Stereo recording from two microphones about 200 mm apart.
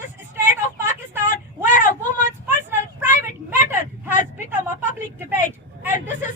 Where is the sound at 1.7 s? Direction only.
40° left (ahead or behind).